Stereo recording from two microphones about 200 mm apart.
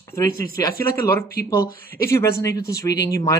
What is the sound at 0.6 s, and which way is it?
Speech, 15° left (ahead or behind).